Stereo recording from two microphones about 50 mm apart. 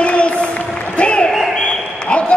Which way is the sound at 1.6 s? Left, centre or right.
Left.